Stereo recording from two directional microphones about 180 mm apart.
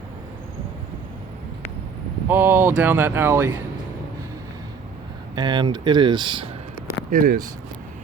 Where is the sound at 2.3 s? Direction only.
10° right (ahead or behind).